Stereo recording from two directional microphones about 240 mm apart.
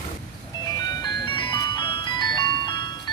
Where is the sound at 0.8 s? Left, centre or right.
Centre.